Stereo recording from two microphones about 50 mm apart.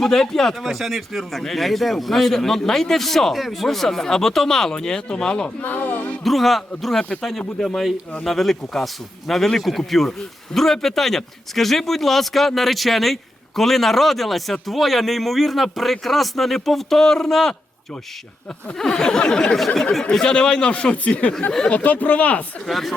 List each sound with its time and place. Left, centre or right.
0.0 s a man's voice: centre
4.7 s a sound: centre
5.6 s speech: left
6.2 s a man's voice: centre
18.8 s a sound: centre
20.1 s speech: centre
22.6 s a man's voice: centre